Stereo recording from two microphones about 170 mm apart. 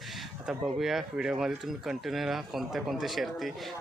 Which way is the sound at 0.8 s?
Centre (ahead or behind).